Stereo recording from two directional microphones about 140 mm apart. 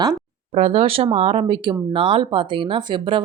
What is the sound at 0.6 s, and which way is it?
Speech, 45° right (ahead or behind).